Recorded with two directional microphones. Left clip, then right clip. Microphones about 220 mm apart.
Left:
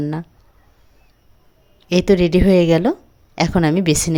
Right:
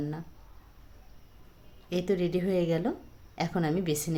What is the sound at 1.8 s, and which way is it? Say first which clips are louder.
A woman's voice: left 14 dB; 45° left (ahead or behind).